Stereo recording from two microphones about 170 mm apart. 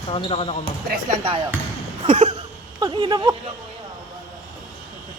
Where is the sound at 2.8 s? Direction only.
25° right (ahead or behind).